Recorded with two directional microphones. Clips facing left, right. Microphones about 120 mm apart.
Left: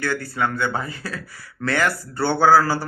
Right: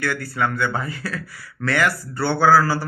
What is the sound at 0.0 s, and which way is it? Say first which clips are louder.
A man's voice: even; 20° left (ahead or behind).